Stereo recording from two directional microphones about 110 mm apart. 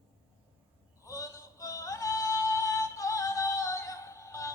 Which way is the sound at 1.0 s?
30° left (ahead or behind).